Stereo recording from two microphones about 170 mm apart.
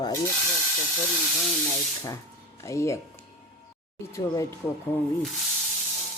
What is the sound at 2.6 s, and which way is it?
Speech, 15° left (ahead or behind).